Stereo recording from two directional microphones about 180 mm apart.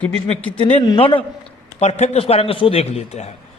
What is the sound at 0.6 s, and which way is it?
A man's voice, 25° left (ahead or behind).